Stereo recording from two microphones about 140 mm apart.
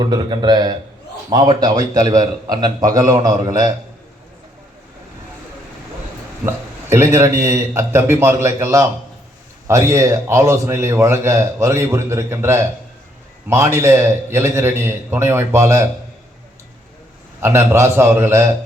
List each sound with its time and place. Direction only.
0.0 s a man's voice: 30° right (ahead or behind)
6.4 s a man's voice: 20° right (ahead or behind)
17.4 s a man's voice: 20° right (ahead or behind)